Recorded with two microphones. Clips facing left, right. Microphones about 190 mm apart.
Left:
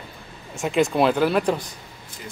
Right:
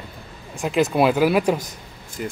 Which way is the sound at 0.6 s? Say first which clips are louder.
Right 1 dB; centre (ahead or behind).